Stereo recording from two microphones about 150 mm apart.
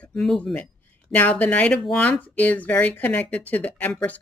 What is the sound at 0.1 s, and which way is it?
Speech, 5° left (ahead or behind).